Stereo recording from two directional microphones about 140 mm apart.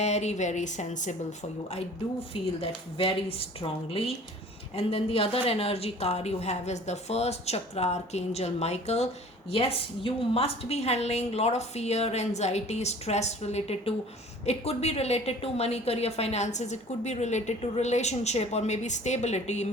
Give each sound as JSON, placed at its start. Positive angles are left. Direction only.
{"t": 0.0, "sound": "a woman's voice", "side_deg": 55}
{"t": 2.3, "sound": "a woman's voice", "side_deg": 40}